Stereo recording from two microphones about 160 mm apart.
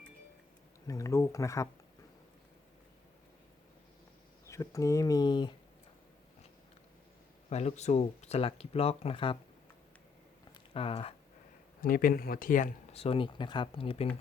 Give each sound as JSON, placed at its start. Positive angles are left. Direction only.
{"t": 0.9, "sound": "speech", "side_deg": 20}
{"t": 4.4, "sound": "speech", "side_deg": 20}
{"t": 7.5, "sound": "speech", "side_deg": 45}
{"t": 10.8, "sound": "speech", "side_deg": 35}
{"t": 11.8, "sound": "speech", "side_deg": 60}
{"t": 12.9, "sound": "speech", "side_deg": 35}